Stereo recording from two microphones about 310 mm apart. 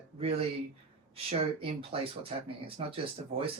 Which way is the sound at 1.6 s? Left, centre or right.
Centre.